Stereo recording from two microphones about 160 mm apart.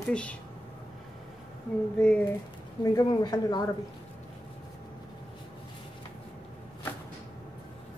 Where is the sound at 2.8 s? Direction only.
25° left (ahead or behind).